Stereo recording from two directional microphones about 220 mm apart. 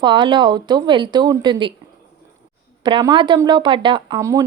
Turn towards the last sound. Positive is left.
turn(degrees=-15)  # may be behind; listen again after turning